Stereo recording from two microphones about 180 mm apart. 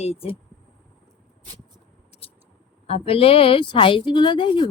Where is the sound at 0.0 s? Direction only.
35° left (ahead or behind).